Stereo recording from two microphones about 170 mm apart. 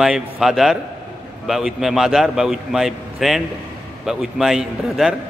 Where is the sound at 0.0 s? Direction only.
5° right (ahead or behind).